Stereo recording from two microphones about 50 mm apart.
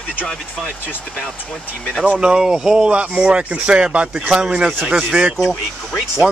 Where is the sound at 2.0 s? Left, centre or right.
Centre.